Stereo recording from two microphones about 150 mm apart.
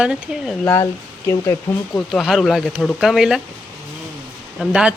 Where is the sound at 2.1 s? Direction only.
Centre (ahead or behind).